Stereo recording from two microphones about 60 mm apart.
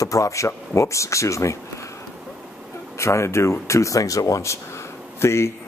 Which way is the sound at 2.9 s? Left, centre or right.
Left.